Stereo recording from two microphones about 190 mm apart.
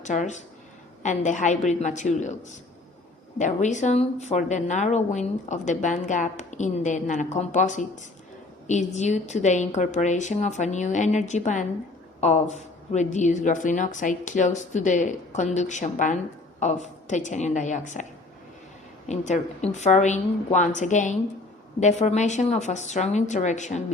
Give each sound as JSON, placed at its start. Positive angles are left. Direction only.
{"t": 0.0, "sound": "a woman's voice", "side_deg": 40}
{"t": 19.0, "sound": "a woman's voice", "side_deg": 40}